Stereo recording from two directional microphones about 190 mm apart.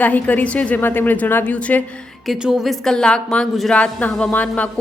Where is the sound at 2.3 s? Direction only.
5° right (ahead or behind).